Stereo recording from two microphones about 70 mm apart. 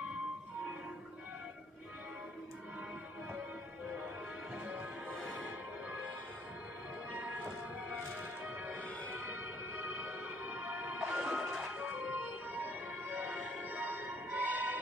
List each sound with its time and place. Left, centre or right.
4.6 s music: right
9.1 s music: right
10.4 s music: right
11.1 s music: centre
11.8 s music: right